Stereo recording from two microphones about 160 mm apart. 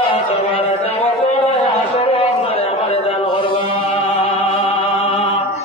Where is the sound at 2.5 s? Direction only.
35° left (ahead or behind).